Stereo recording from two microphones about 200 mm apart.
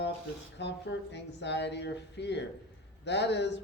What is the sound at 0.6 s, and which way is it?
Speech, 60° left (ahead or behind).